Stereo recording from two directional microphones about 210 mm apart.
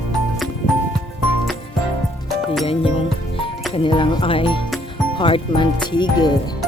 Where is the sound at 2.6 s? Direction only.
25° left (ahead or behind).